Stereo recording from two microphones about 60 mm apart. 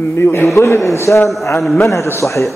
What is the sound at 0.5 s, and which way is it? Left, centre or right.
A man's voice, left.